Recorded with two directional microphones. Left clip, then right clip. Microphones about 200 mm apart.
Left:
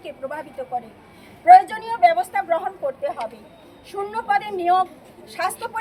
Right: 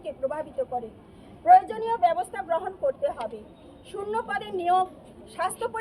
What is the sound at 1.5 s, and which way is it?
A woman's voice, 5° left (ahead or behind).